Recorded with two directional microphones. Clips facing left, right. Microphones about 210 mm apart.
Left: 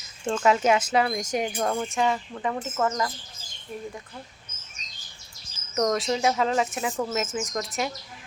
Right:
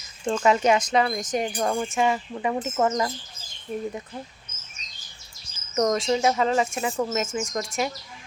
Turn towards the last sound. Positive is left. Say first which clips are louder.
# right 2 dB
turn(degrees=0)  # may be behind; listen again after turning